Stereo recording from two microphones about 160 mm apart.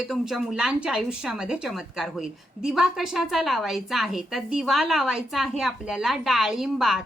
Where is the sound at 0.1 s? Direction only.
Centre (ahead or behind).